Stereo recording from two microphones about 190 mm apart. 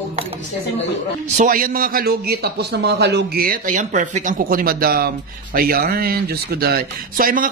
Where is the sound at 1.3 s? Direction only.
45° right (ahead or behind).